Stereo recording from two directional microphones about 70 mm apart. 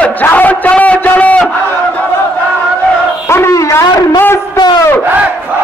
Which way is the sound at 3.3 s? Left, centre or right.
Left.